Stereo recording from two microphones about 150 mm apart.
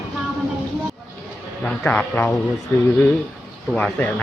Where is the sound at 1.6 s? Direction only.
10° left (ahead or behind).